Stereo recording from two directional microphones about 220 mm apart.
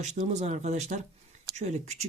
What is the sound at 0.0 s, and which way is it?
Speech, 30° right (ahead or behind).